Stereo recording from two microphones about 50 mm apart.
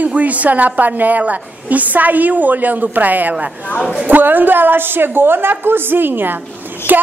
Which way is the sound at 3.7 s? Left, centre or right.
Left.